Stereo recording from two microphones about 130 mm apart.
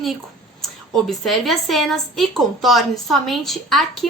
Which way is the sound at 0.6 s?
Centre (ahead or behind).